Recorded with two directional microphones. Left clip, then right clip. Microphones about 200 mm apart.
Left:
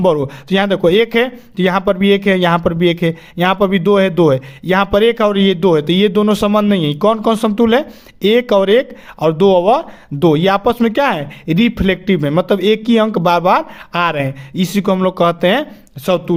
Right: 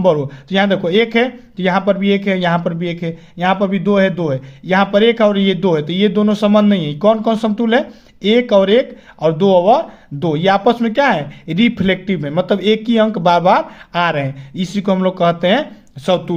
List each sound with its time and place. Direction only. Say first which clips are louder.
0.0 s speech: even; 40° left (ahead or behind)
16.0 s speech: even; 20° left (ahead or behind)